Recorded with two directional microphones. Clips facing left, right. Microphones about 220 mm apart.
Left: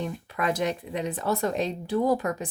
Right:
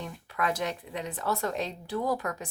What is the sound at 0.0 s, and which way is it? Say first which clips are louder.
Speech: left 4 dB; 20° left (ahead or behind).